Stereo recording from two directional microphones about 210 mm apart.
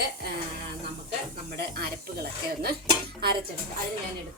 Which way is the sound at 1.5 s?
50° right (ahead or behind).